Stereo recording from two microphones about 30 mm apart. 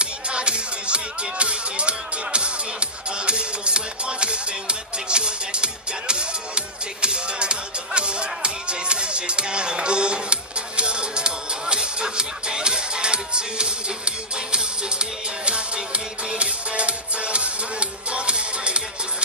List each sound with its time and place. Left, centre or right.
0.0 s music: right